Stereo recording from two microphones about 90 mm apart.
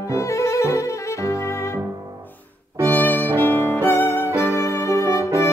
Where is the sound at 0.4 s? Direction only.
35° left (ahead or behind).